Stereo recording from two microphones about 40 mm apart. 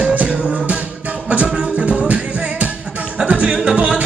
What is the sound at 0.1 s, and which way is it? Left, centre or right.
Music, right.